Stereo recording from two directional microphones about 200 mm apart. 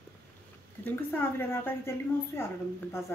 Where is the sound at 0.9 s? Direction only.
10° left (ahead or behind).